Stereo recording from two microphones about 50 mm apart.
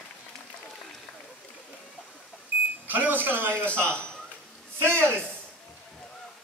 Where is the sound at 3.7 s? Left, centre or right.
Left.